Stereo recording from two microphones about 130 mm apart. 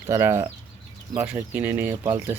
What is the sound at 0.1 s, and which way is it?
Speech, 20° right (ahead or behind).